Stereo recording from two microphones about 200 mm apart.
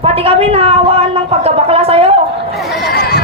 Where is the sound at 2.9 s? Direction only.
55° left (ahead or behind).